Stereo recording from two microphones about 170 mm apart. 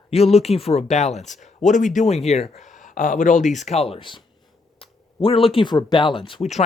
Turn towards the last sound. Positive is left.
turn(degrees=30)  # may be behind; listen again after turning